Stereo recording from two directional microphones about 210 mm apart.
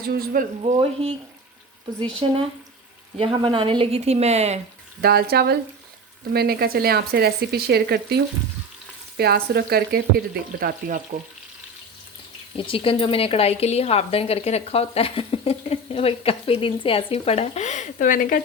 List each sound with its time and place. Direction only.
0.0 s speech: 45° right (ahead or behind)
0.6 s speech: 30° right (ahead or behind)
2.2 s speech: 25° right (ahead or behind)
4.9 s speech: 45° right (ahead or behind)
10.6 s frying: 45° right (ahead or behind)
12.5 s a woman's voice: 25° left (ahead or behind); by 18.4 s 40° left (ahead or behind)